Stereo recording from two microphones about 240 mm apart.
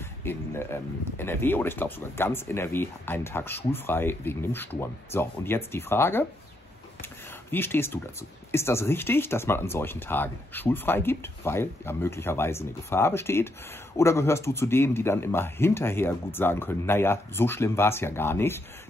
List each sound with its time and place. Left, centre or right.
0.0 s speech: centre
7.5 s speech: centre